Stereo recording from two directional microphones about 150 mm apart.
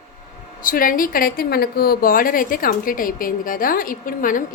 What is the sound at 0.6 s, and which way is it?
A woman's voice, 70° left (ahead or behind).